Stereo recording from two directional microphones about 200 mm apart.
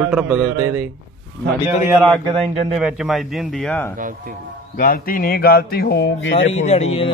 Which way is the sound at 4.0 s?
40° right (ahead or behind).